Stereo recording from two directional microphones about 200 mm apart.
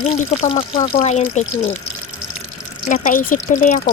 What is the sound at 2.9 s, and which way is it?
Speech, 40° left (ahead or behind).